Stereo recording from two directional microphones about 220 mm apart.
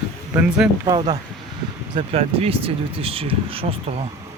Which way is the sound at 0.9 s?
20° right (ahead or behind).